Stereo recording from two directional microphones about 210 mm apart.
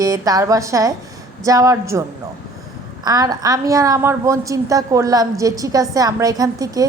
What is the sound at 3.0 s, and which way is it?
A woman's voice, 15° right (ahead or behind).